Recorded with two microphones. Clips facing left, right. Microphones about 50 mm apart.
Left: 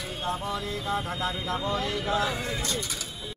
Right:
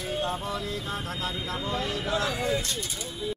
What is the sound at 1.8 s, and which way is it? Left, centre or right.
Speech, centre.